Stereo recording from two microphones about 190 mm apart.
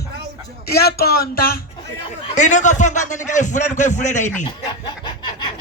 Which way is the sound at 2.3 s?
40° left (ahead or behind).